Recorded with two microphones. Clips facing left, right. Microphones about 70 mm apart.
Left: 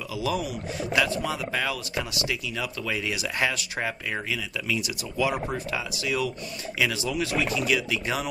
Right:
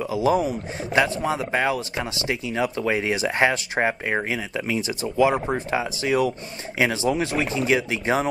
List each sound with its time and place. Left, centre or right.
0.1 s speech: right